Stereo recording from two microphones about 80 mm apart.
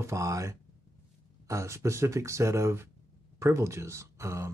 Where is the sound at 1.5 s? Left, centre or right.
Right.